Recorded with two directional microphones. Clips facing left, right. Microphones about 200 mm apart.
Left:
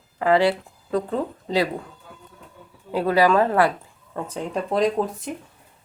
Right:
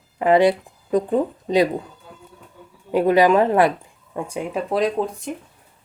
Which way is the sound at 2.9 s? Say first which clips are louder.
Right 3 dB; 20° right (ahead or behind).